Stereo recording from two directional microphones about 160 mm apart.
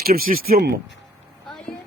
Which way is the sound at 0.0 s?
65° right (ahead or behind).